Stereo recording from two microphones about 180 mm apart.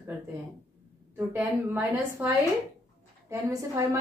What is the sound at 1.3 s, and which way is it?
A woman's voice, 15° right (ahead or behind).